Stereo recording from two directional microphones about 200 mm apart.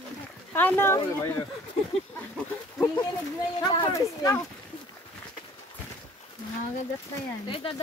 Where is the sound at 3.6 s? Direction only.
20° left (ahead or behind).